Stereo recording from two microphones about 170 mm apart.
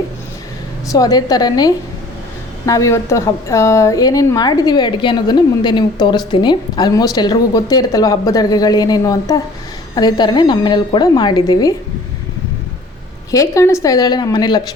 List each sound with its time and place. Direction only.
0.9 s a woman's voice: 20° left (ahead or behind)
13.3 s a woman's voice: 20° left (ahead or behind)